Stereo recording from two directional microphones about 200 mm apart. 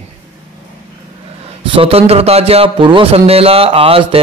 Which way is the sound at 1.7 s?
30° right (ahead or behind).